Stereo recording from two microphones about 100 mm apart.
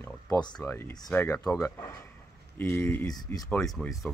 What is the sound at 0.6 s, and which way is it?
Speech, 20° left (ahead or behind).